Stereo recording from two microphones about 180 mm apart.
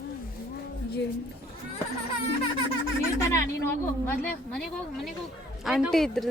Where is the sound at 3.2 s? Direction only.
15° left (ahead or behind).